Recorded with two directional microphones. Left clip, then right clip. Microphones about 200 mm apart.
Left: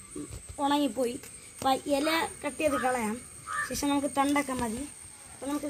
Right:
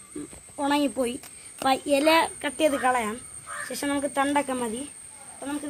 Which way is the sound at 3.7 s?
25° right (ahead or behind).